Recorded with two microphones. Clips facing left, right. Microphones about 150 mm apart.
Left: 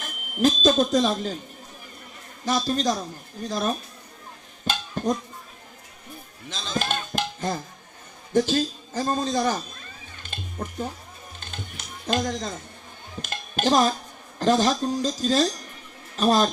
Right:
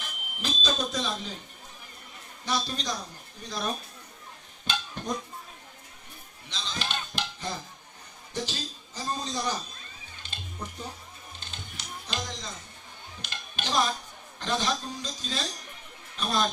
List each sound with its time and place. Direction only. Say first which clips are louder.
0.0 s speech: left 15 dB; 45° left (ahead or behind)
2.4 s speech: left 8 dB; 45° left (ahead or behind)
4.6 s a sound: left 8 dB; 45° left (ahead or behind)
6.5 s basketball bounce: left 7 dB; 45° left (ahead or behind)
8.3 s a man's voice: left 14 dB; 50° left (ahead or behind)
10.2 s music: left 6 dB; 50° left (ahead or behind)
13.2 s a man's voice: left 12 dB; 45° left (ahead or behind)